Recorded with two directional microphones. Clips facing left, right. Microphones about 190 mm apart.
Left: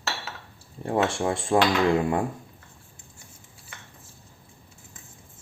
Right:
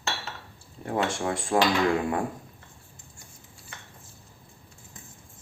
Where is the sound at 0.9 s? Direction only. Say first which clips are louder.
Left 3 dB; 25° left (ahead or behind).